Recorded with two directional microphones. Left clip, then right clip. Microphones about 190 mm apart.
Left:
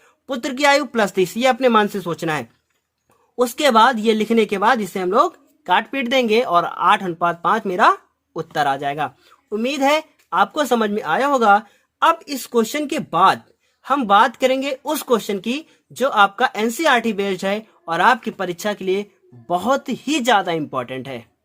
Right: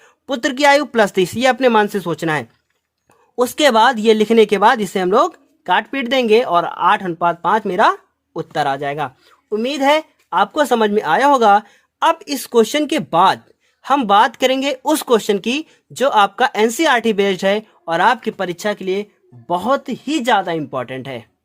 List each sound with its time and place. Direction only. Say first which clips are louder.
0.0 s speech: right 6 dB; 30° right (ahead or behind)